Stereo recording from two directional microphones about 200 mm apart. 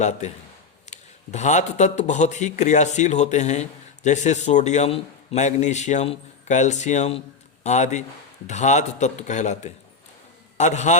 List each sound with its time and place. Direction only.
0.2 s speech: 35° left (ahead or behind)